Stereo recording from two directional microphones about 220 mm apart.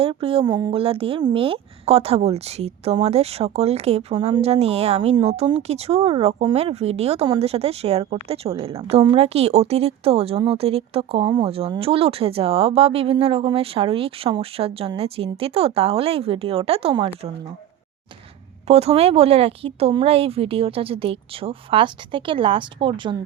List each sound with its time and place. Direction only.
0.0 s speech: 25° right (ahead or behind)
18.7 s speech: 30° right (ahead or behind)